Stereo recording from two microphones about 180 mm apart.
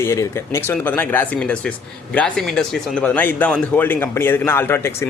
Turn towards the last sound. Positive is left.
turn(degrees=10)  # may be behind; listen again after turning